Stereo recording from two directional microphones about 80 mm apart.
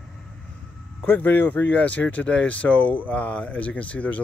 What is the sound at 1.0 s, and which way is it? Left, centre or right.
Speech, left.